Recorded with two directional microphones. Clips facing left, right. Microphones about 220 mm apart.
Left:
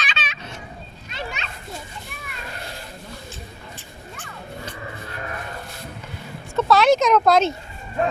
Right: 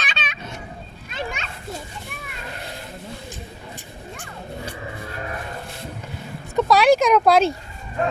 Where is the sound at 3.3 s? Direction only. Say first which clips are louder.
Right 2 dB; 15° right (ahead or behind).